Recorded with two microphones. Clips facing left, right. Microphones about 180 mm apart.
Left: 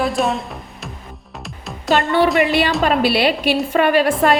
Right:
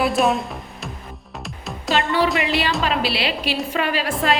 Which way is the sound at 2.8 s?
50° left (ahead or behind).